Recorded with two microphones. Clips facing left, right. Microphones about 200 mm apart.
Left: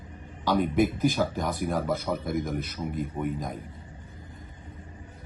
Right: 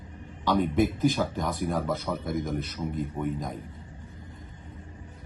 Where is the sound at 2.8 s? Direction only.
15° left (ahead or behind).